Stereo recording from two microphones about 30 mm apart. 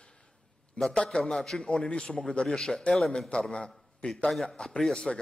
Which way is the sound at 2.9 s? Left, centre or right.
Left.